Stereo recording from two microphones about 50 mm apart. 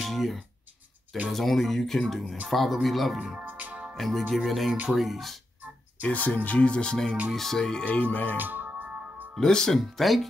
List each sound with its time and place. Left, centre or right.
0.0 s speech: centre
3.3 s music: right
3.9 s speech: centre
6.0 s speech: left; by 7.8 s centre
7.8 s speech: left
8.4 s music: right
9.3 s speech: centre
9.8 s speech: centre